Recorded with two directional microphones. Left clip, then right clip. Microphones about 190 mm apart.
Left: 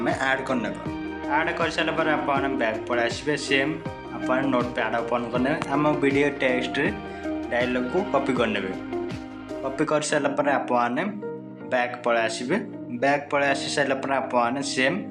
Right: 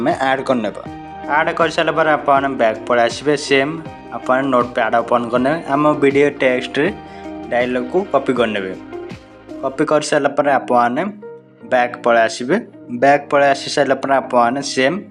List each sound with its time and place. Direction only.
0.0 s speech: 40° right (ahead or behind)
9.7 s speech: 25° right (ahead or behind)